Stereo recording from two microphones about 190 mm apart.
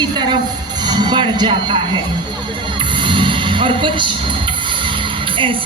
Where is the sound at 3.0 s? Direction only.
25° right (ahead or behind).